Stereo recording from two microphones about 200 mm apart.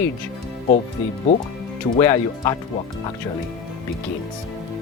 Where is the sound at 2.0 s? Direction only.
15° left (ahead or behind).